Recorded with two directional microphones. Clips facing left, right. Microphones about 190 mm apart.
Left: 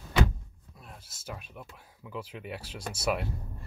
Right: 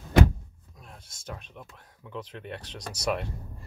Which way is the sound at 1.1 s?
5° left (ahead or behind).